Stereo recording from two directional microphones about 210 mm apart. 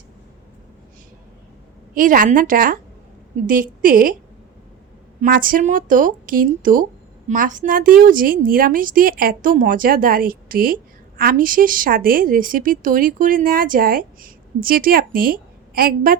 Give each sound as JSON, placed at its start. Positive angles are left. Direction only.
{"t": 2.0, "sound": "speech", "side_deg": -40}
{"t": 5.2, "sound": "speech", "side_deg": -40}